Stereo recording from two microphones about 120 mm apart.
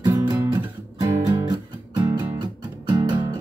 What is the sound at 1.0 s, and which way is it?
Music, 25° right (ahead or behind).